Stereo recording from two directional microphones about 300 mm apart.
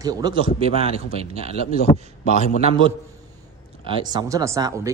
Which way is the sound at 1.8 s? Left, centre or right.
Left.